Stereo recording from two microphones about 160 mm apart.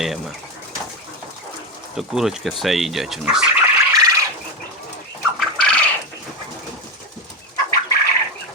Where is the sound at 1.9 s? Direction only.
Centre (ahead or behind).